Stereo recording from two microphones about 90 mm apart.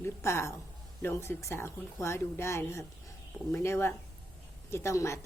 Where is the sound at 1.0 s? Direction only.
30° left (ahead or behind).